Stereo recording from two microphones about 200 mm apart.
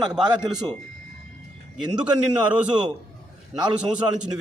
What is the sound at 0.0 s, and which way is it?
Speech, 5° right (ahead or behind).